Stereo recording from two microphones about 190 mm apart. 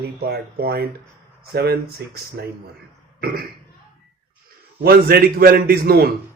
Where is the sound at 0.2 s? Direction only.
55° right (ahead or behind).